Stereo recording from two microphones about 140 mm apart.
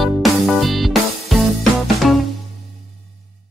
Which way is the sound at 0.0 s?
Centre (ahead or behind).